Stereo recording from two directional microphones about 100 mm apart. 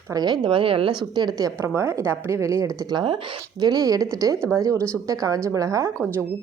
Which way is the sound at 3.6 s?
40° right (ahead or behind).